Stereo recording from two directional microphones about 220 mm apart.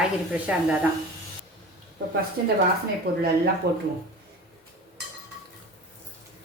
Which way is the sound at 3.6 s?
45° right (ahead or behind).